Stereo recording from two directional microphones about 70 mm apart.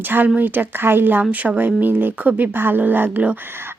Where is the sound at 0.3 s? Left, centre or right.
Right.